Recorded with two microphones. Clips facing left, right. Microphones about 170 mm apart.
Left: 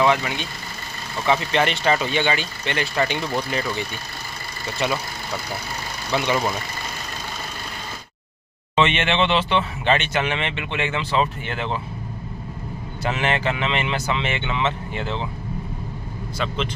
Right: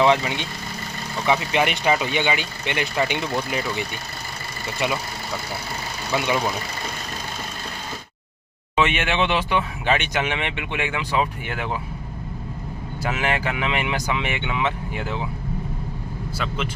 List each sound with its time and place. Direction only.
0.0 s speech: 25° right (ahead or behind)
1.3 s speech: 10° right (ahead or behind)
6.1 s speech: 5° right (ahead or behind)
8.7 s speech: 10° right (ahead or behind)
13.0 s speech: 5° right (ahead or behind)